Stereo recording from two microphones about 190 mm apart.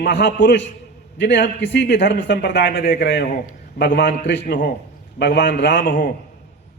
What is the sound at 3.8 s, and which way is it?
A man's voice, 65° left (ahead or behind).